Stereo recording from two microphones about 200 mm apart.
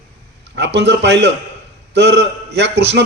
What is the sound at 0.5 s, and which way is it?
A man's voice, 60° right (ahead or behind).